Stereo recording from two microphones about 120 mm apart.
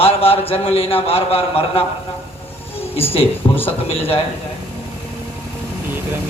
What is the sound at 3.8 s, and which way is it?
Speech, 55° left (ahead or behind).